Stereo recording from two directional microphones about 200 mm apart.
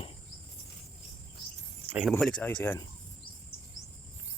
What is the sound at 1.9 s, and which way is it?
Speech, centre (ahead or behind).